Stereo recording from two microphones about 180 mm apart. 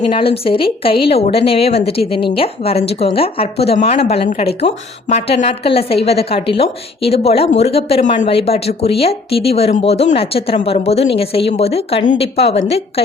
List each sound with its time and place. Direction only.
0.0 s a woman's voice: 30° left (ahead or behind)